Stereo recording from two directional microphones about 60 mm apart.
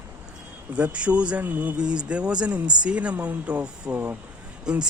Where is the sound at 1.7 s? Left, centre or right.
Centre.